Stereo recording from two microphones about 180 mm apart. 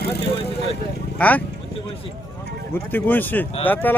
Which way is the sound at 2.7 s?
10° left (ahead or behind).